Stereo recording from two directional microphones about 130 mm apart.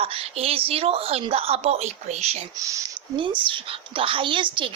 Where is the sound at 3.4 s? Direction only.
40° right (ahead or behind).